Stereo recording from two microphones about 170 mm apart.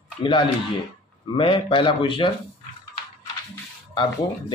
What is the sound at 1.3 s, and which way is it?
Speech, 30° left (ahead or behind).